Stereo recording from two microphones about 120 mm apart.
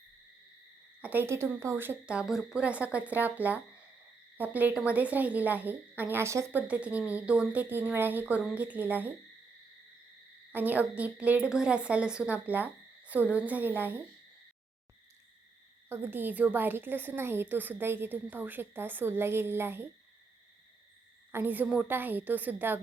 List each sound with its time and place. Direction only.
1.0 s a woman's voice: 15° right (ahead or behind)
10.5 s a woman's voice: 15° right (ahead or behind)
15.9 s a woman's voice: 15° right (ahead or behind)
21.3 s a woman's voice: 15° right (ahead or behind)